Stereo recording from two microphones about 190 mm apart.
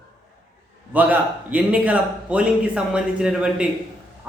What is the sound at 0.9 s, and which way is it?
A man's voice, 10° right (ahead or behind).